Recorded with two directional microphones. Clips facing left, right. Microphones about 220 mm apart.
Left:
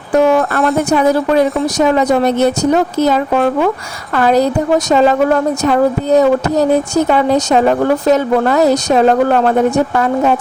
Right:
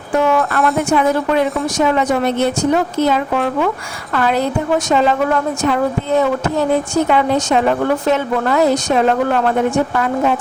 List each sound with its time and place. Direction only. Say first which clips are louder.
0.1 s speech: left 4 dB; 40° left (ahead or behind)